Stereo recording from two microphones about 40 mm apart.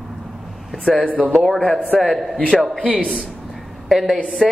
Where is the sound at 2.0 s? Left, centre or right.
Centre.